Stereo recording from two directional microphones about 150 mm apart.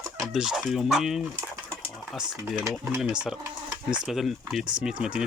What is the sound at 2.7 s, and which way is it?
Speech, 5° right (ahead or behind).